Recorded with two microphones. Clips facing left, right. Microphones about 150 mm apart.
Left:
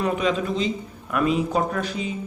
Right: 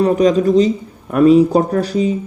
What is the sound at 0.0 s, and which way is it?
Speech, 40° right (ahead or behind).